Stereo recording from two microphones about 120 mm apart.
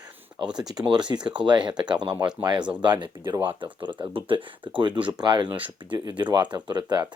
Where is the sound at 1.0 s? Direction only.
35° right (ahead or behind).